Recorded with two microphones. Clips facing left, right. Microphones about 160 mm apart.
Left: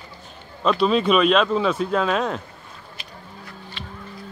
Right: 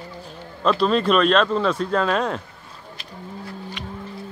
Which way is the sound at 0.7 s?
Centre (ahead or behind).